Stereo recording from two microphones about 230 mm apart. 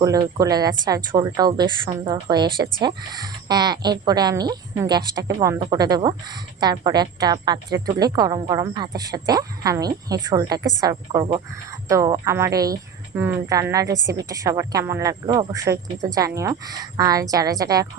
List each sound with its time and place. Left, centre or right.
0.0 s a woman's voice: centre